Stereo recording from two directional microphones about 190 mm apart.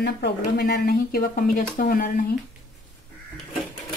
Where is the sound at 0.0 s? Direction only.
55° left (ahead or behind).